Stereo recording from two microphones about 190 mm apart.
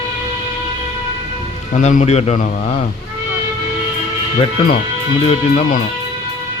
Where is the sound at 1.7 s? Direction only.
40° left (ahead or behind).